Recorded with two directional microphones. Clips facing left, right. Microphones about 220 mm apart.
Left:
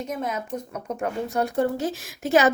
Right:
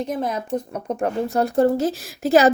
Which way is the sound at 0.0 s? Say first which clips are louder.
Right 4 dB; 35° right (ahead or behind).